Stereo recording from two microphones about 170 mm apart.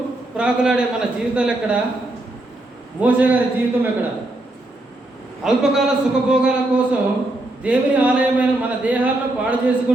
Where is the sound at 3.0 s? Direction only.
10° right (ahead or behind).